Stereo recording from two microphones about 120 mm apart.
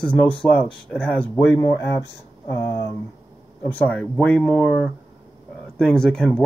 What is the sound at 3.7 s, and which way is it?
Speech, 10° left (ahead or behind).